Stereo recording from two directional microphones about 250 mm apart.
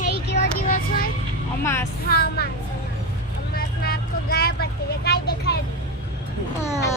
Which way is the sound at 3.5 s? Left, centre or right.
Left.